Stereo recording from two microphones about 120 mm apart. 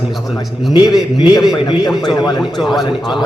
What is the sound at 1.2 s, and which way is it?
A man's voice, 35° left (ahead or behind).